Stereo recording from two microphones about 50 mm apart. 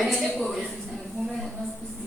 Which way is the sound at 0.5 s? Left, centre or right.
Centre.